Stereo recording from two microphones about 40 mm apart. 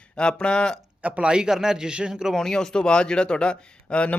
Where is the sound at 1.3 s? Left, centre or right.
Centre.